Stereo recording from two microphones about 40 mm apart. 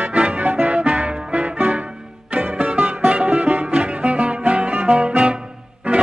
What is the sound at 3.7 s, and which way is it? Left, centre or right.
Music, right.